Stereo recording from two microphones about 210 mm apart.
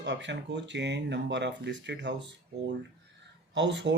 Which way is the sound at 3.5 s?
55° right (ahead or behind).